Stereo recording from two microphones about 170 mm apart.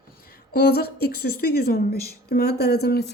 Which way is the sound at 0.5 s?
70° left (ahead or behind).